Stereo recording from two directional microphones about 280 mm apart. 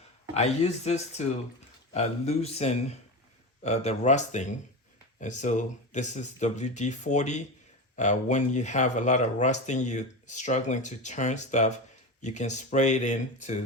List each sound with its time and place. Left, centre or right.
0.3 s speech: left